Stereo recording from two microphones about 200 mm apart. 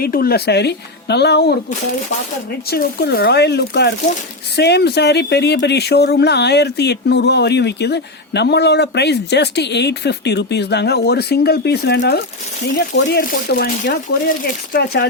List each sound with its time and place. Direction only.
0.0 s speech: 50° left (ahead or behind)
2.6 s speech: 50° left (ahead or behind)